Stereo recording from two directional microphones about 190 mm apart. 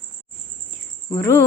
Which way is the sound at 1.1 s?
20° left (ahead or behind).